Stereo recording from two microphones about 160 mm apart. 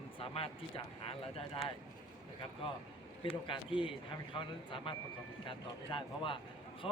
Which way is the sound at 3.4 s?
30° left (ahead or behind).